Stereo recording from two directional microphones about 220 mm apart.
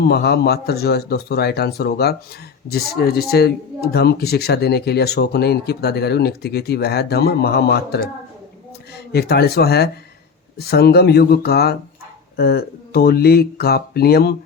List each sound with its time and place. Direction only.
0.0 s speech: 45° left (ahead or behind)
9.1 s speech: 45° left (ahead or behind)